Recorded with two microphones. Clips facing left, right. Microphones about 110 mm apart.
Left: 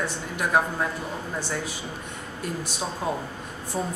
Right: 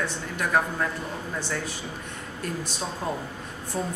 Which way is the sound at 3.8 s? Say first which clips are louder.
Left 1 dB; 15° left (ahead or behind).